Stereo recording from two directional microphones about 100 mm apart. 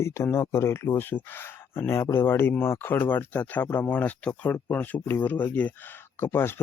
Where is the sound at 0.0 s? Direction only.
25° left (ahead or behind).